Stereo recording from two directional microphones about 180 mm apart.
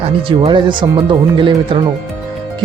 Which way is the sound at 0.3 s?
25° right (ahead or behind).